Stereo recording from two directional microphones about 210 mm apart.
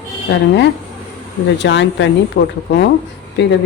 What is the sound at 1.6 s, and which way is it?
Speech, 60° left (ahead or behind).